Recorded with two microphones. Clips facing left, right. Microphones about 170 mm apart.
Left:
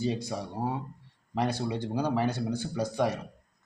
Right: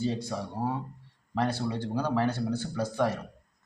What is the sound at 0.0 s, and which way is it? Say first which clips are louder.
Speech: even; 10° left (ahead or behind).